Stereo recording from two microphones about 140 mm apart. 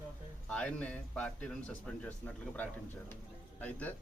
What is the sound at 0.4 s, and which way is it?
Speech, 10° left (ahead or behind).